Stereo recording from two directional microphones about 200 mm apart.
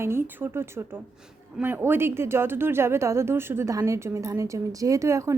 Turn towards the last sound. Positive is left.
turn(degrees=-15)  # may be behind; listen again after turning